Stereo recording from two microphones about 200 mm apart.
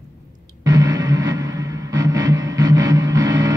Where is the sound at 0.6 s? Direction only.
15° right (ahead or behind).